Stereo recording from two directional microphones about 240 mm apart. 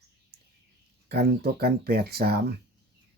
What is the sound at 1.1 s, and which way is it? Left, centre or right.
Speech, right.